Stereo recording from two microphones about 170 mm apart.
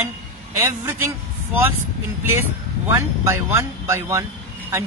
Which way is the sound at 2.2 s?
15° right (ahead or behind).